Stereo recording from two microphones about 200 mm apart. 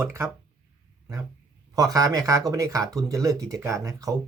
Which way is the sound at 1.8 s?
15° right (ahead or behind).